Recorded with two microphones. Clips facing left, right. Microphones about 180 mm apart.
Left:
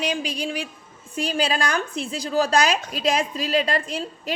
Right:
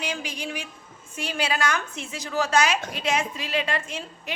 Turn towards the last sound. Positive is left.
turn(degrees=35)  # may be behind; listen again after turning